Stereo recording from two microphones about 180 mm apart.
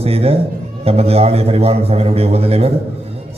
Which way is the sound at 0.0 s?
35° right (ahead or behind).